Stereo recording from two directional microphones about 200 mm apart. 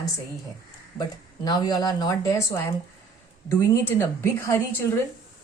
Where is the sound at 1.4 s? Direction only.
20° left (ahead or behind).